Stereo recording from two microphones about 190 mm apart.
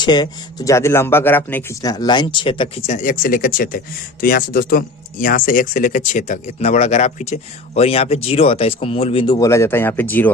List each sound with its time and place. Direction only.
0.0 s speech: 20° left (ahead or behind)
1.9 s speech: 20° left (ahead or behind)